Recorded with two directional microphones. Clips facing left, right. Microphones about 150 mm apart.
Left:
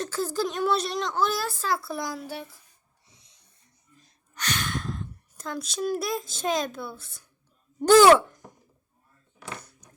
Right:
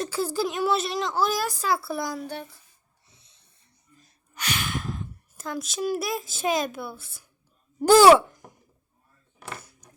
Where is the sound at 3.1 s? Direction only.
15° left (ahead or behind).